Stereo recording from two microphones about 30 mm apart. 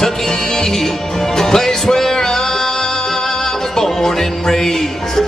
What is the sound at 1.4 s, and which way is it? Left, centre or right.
Music, centre.